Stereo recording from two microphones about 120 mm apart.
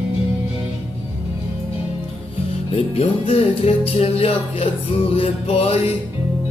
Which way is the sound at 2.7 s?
55° left (ahead or behind).